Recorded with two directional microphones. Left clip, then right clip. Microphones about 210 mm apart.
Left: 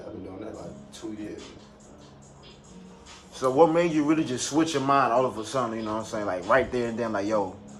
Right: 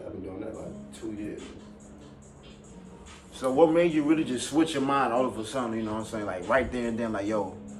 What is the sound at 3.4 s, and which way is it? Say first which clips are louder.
A man's voice: left 1 dB; 35° left (ahead or behind).